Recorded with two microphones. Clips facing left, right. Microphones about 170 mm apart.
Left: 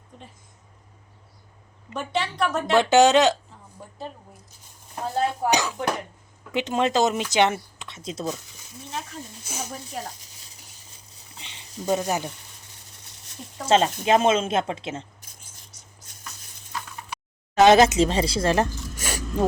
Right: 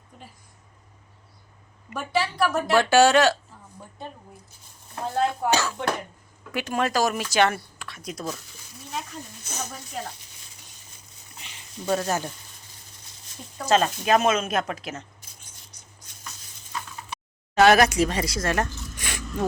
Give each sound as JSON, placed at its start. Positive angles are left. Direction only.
{"t": 2.1, "sound": "speech", "side_deg": 20}
{"t": 2.4, "sound": "speech", "side_deg": -5}
{"t": 2.7, "sound": "speech", "side_deg": 20}
{"t": 4.9, "sound": "speech", "side_deg": 15}
{"t": 9.0, "sound": "sizzle", "side_deg": 10}
{"t": 11.3, "sound": "a sound", "side_deg": 30}
{"t": 11.9, "sound": "speech", "side_deg": 15}
{"t": 13.7, "sound": "speech", "side_deg": 25}
{"t": 17.6, "sound": "speech", "side_deg": 20}
{"t": 18.9, "sound": "a sound", "side_deg": 40}